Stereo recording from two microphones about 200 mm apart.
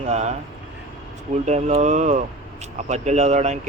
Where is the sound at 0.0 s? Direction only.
35° right (ahead or behind).